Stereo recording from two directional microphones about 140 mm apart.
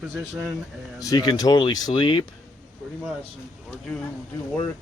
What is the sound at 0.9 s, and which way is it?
Speech, 25° left (ahead or behind).